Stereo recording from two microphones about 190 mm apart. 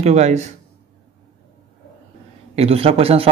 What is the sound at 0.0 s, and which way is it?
Speech, 35° right (ahead or behind).